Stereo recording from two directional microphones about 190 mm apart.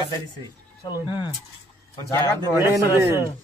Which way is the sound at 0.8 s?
20° left (ahead or behind).